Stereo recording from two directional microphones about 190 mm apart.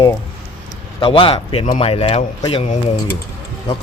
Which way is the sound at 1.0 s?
30° left (ahead or behind).